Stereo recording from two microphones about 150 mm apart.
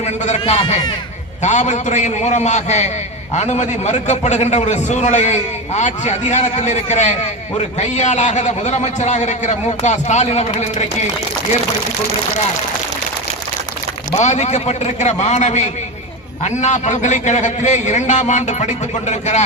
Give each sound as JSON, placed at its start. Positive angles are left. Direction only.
{"t": 0.0, "sound": "a man's voice", "side_deg": 45}
{"t": 1.4, "sound": "a man's voice", "side_deg": 50}
{"t": 14.2, "sound": "a man's voice", "side_deg": 50}